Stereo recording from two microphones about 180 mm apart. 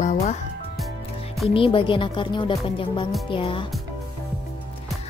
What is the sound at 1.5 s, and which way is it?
Speech, 30° left (ahead or behind).